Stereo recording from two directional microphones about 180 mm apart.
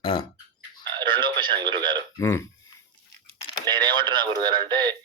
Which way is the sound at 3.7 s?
25° right (ahead or behind).